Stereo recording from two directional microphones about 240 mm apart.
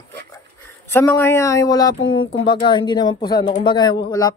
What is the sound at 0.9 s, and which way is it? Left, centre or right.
Speech, centre.